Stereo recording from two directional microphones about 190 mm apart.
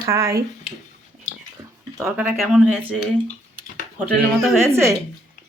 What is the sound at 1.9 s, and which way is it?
Speech, 15° right (ahead or behind).